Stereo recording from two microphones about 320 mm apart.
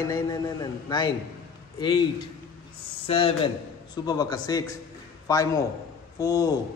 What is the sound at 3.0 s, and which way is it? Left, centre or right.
A man's voice, centre.